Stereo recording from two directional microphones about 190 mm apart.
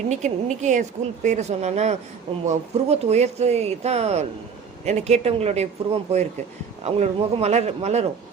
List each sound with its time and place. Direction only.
0.1 s speech: 40° right (ahead or behind)